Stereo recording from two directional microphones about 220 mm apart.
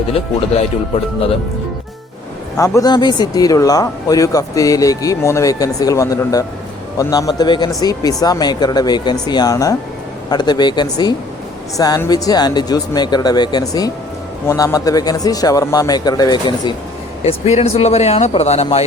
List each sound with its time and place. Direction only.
2.6 s speech: 15° left (ahead or behind); by 18.8 s 30° left (ahead or behind)